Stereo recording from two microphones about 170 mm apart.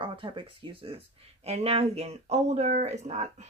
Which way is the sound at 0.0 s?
30° right (ahead or behind).